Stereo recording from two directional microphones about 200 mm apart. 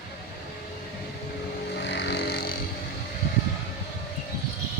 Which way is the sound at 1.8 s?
60° left (ahead or behind).